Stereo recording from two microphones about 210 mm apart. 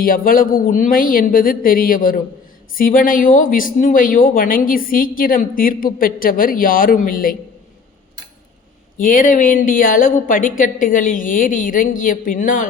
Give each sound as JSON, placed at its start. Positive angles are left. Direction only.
{"t": 0.0, "sound": "speech", "side_deg": 40}
{"t": 9.0, "sound": "speech", "side_deg": 40}